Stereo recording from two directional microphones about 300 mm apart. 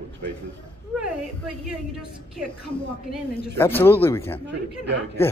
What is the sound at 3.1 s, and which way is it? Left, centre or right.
Speech, centre.